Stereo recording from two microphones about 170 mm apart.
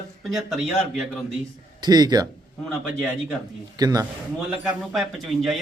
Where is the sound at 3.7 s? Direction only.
20° right (ahead or behind).